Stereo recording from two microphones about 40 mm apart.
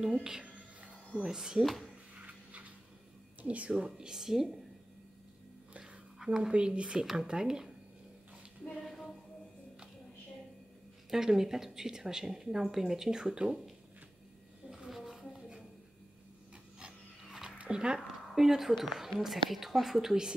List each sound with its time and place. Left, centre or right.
0.0 s a woman's voice: centre
1.6 s speech: centre
2.2 s a sound: right
3.4 s speech: right
4.1 s a woman's voice: centre
6.1 s speech: centre
6.5 s speech: right
7.0 s a woman's voice: centre
8.8 s a sound: centre
11.1 s a woman's voice: centre
14.7 s a sound: centre
17.3 s a sound: centre
17.6 s speech: centre